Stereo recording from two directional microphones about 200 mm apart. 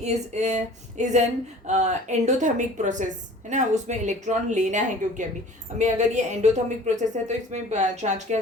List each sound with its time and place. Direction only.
0.0 s speech: 35° right (ahead or behind)